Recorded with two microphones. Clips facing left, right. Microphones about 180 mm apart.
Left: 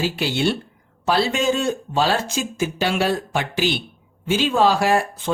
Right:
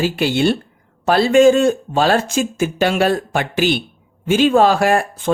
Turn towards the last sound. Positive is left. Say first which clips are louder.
# right 3 dB
turn(degrees=-50)  # may be behind; listen again after turning